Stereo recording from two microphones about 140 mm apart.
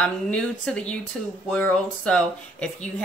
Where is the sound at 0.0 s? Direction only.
10° left (ahead or behind).